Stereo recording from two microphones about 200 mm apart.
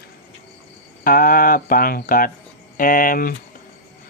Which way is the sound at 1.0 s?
45° left (ahead or behind).